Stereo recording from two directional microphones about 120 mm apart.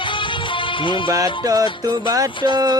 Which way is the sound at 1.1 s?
30° right (ahead or behind).